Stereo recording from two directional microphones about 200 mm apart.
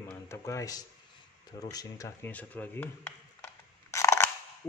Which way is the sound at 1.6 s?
20° left (ahead or behind).